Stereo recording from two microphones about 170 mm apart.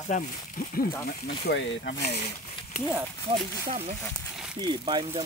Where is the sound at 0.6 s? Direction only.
60° left (ahead or behind).